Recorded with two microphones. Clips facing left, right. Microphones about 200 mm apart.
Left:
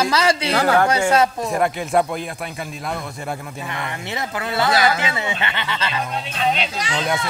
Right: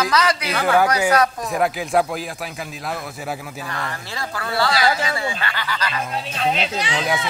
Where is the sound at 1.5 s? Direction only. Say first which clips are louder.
Left 1 dB; centre (ahead or behind).